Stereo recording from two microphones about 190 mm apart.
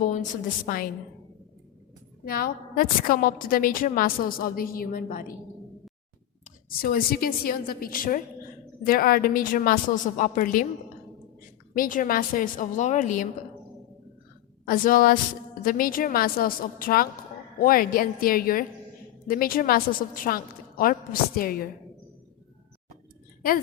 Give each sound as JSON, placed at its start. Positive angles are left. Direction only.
{"t": 0.0, "sound": "a woman's voice", "side_deg": 40}
{"t": 2.2, "sound": "a woman's voice", "side_deg": 50}
{"t": 6.7, "sound": "a woman's voice", "side_deg": 50}
{"t": 11.7, "sound": "a woman's voice", "side_deg": 45}
{"t": 14.6, "sound": "a woman's voice", "side_deg": 45}